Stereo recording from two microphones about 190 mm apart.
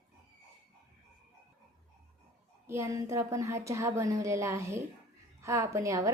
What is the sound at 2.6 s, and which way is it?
A woman's voice, 15° right (ahead or behind).